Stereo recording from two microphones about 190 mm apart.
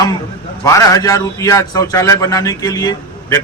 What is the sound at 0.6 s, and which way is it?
A man's voice, 15° left (ahead or behind).